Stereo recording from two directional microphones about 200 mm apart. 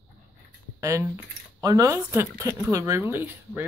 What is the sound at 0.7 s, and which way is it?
Speech, 15° right (ahead or behind).